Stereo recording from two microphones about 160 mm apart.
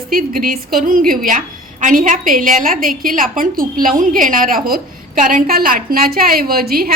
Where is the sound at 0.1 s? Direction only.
60° right (ahead or behind).